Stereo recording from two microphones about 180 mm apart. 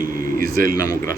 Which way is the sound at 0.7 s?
20° left (ahead or behind).